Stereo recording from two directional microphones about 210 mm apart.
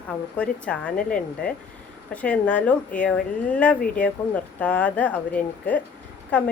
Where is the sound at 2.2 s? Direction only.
5° left (ahead or behind).